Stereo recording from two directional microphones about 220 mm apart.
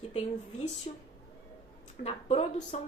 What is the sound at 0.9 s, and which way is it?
Speech, 30° left (ahead or behind).